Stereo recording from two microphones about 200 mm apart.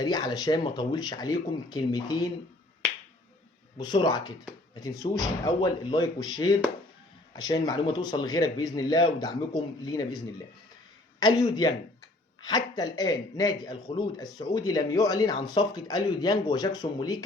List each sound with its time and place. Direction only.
0.0 s speech: 20° left (ahead or behind)
3.8 s speech: 20° left (ahead or behind)
7.3 s speech: 20° left (ahead or behind)
11.2 s speech: 20° left (ahead or behind)